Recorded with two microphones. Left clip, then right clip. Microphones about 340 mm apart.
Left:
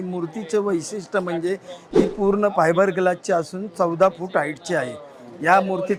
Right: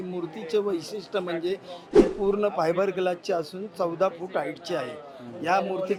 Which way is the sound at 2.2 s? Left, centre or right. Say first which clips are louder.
Left 6 dB; left.